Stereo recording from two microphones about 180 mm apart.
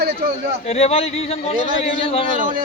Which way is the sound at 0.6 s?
35° left (ahead or behind).